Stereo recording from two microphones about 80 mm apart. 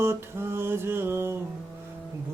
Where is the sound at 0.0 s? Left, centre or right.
Right.